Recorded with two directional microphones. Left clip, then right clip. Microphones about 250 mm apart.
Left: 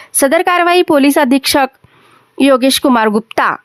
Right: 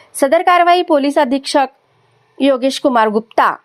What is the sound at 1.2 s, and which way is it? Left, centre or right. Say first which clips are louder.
Speech: left 6 dB; left.